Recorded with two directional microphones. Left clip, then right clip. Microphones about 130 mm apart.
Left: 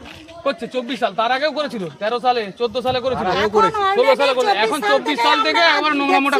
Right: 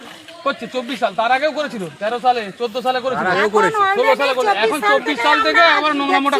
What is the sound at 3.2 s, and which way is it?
Speech, 65° right (ahead or behind).